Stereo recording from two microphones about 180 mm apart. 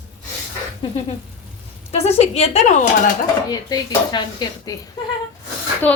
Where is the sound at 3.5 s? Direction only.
25° left (ahead or behind).